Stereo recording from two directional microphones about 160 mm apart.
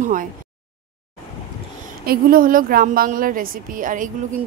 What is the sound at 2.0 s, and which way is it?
A woman's voice, 65° right (ahead or behind).